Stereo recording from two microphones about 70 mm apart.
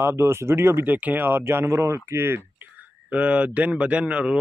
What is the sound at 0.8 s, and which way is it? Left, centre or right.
A man's voice, right.